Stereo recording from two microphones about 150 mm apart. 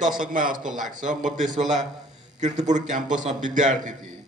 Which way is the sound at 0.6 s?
5° right (ahead or behind).